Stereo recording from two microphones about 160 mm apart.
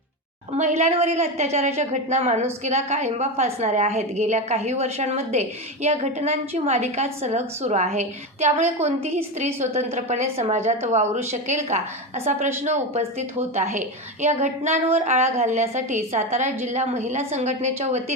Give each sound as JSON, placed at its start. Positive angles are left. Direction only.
{"t": 0.5, "sound": "a woman's voice", "side_deg": -45}